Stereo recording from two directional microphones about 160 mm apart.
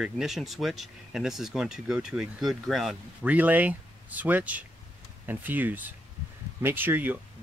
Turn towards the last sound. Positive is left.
turn(degrees=-10)  # may be behind; listen again after turning